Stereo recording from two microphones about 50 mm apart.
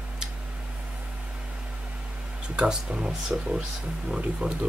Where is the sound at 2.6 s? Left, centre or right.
Centre.